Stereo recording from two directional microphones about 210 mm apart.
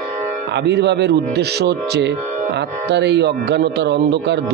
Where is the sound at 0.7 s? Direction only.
55° right (ahead or behind).